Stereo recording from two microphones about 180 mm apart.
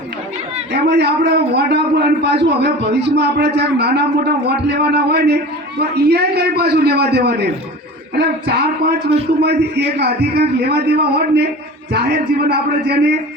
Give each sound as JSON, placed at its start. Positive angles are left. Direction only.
{"t": 0.7, "sound": "a man's voice", "side_deg": -70}